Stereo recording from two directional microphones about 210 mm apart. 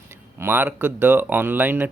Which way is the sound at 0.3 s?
10° right (ahead or behind).